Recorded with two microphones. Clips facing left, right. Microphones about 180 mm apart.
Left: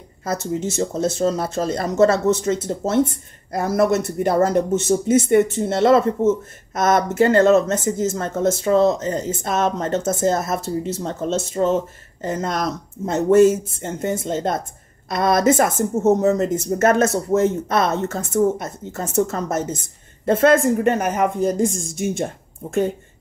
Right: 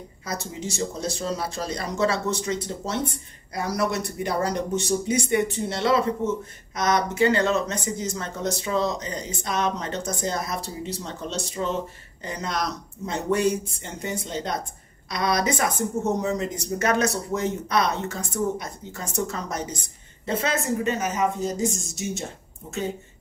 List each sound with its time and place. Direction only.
0.7 s speech: 50° left (ahead or behind)